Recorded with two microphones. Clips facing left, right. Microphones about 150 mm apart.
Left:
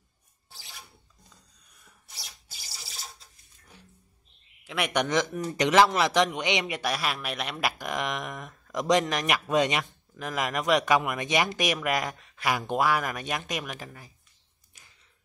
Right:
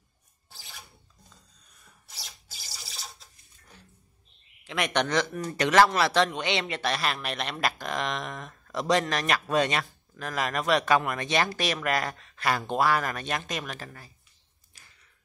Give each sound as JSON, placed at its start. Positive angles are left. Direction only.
{"t": 2.7, "sound": "water", "side_deg": 0}
{"t": 4.6, "sound": "a man's voice", "side_deg": 10}
{"t": 14.7, "sound": "a sound", "side_deg": 20}